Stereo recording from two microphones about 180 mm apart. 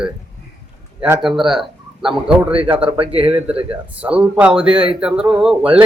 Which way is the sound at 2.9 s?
30° right (ahead or behind).